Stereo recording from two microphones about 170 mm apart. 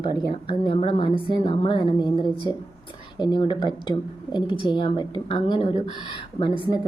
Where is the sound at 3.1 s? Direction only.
25° left (ahead or behind).